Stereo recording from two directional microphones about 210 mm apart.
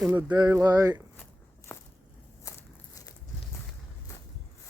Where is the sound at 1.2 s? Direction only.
10° left (ahead or behind).